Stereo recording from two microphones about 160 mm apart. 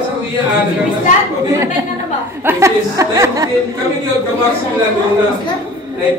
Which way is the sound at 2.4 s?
20° right (ahead or behind).